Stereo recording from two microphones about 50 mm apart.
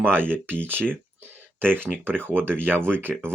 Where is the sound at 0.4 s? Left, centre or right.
Right.